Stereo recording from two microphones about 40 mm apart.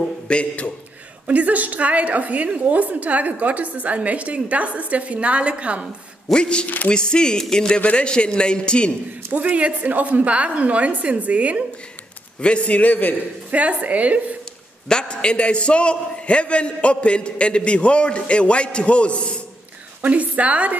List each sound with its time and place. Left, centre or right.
0.3 s a man's voice: left
1.2 s a woman's voice: right
6.3 s a man's voice: left
9.3 s a woman's voice: right
12.4 s a man's voice: left
13.5 s a woman's voice: right
14.9 s a man's voice: left
20.0 s a woman's voice: right